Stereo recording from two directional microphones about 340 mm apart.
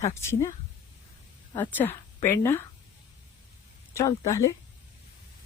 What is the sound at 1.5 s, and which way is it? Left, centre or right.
Speech, centre.